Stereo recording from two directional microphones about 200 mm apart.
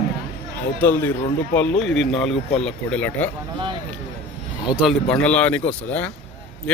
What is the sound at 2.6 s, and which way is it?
Speech, 5° left (ahead or behind).